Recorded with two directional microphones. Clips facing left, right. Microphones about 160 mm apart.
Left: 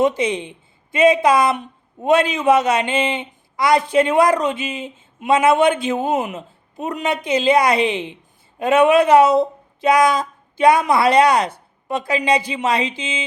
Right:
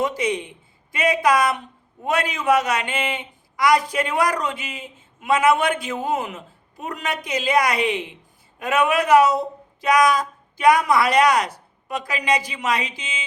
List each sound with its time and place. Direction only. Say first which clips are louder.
0.0 s speech: left 5 dB; 25° left (ahead or behind)